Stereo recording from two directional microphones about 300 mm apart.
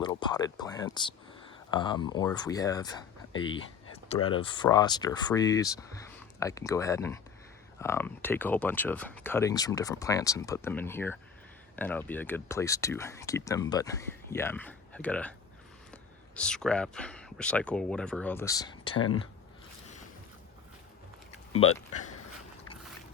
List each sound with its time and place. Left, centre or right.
0.0 s speech: centre
21.5 s speech: left